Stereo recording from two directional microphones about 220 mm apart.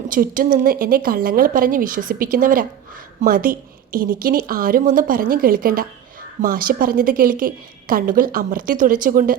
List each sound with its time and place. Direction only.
0.1 s a woman's voice: 40° right (ahead or behind)